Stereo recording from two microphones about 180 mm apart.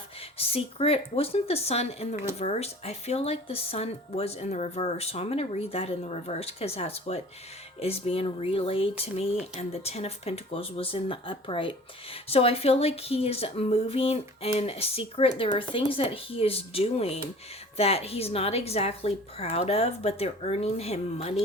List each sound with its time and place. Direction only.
0.3 s speech: 30° left (ahead or behind)